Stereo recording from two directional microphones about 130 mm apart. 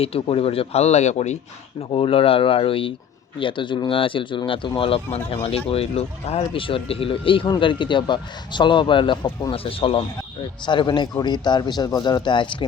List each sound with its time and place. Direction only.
0.0 s speech: 50° left (ahead or behind)
1.9 s speech: 45° left (ahead or behind)